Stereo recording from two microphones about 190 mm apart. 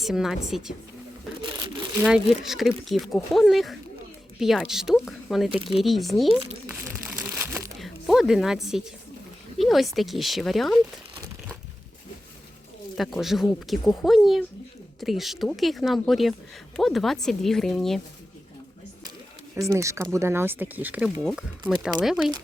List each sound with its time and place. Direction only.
0.0 s speech: centre (ahead or behind)
1.4 s tearing: 20° right (ahead or behind)
2.0 s speech: 5° right (ahead or behind)
5.8 s crumpling: centre (ahead or behind)
7.8 s speech: centre (ahead or behind)
13.0 s speech: centre (ahead or behind)
19.5 s speech: 15° right (ahead or behind)